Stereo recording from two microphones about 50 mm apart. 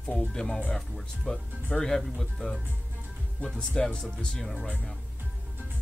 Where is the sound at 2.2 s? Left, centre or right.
Centre.